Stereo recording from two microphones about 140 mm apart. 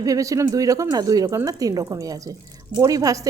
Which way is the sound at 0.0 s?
25° right (ahead or behind).